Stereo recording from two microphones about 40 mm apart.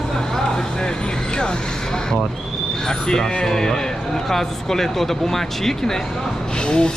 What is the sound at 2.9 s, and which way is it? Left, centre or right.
A man's voice, centre.